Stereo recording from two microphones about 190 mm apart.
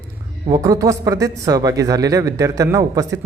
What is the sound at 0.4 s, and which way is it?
Speech, 20° right (ahead or behind).